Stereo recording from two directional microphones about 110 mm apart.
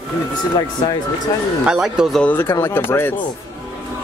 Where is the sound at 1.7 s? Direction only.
5° right (ahead or behind).